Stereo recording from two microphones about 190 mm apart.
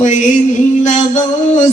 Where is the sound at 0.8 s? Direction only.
40° left (ahead or behind).